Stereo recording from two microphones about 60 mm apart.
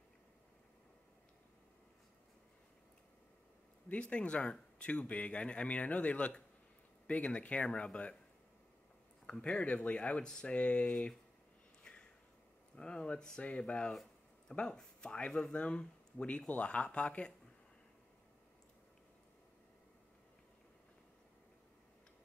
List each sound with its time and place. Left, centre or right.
3.9 s speech: centre
9.2 s speech: centre
11.8 s a sound: centre
12.7 s speech: centre